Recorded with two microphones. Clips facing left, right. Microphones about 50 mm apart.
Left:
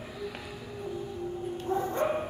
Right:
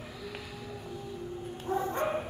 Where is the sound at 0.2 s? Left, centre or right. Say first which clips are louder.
Left 3 dB; centre.